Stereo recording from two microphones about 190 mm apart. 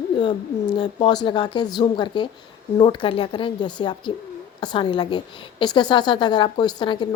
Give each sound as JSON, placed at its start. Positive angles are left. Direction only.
{"t": 0.2, "sound": "a woman's voice", "side_deg": 25}